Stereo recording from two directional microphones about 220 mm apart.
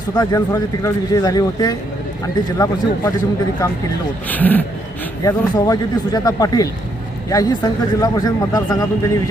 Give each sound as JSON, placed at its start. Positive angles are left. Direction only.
{"t": 0.1, "sound": "speech", "side_deg": 15}
{"t": 4.3, "sound": "speech", "side_deg": 10}